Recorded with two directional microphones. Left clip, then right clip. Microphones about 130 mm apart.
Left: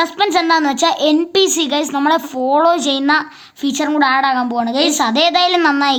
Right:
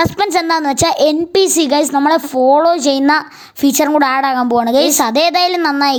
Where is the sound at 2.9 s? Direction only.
50° right (ahead or behind).